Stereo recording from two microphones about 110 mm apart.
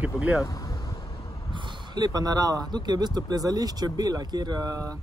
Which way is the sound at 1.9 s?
35° right (ahead or behind).